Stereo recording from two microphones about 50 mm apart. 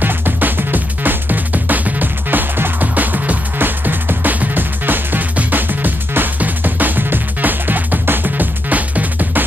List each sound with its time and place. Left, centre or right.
0.0 s music: right